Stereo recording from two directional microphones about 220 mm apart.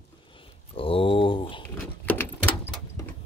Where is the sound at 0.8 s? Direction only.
25° left (ahead or behind).